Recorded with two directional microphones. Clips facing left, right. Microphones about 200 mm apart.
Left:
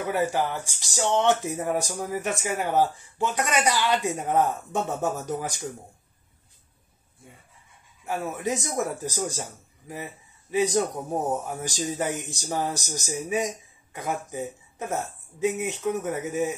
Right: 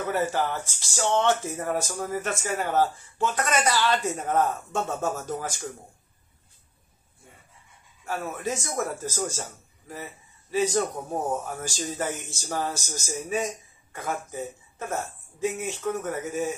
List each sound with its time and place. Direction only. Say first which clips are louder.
0.0 s speech: left 1 dB; 15° left (ahead or behind)
8.0 s speech: left 2 dB; 15° left (ahead or behind)